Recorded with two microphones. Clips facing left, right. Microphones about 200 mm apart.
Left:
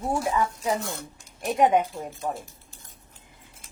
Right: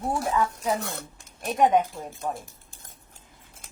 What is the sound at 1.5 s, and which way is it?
Speech, 10° left (ahead or behind).